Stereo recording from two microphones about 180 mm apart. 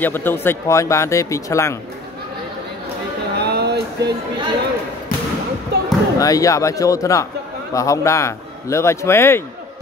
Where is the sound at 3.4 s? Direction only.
65° right (ahead or behind).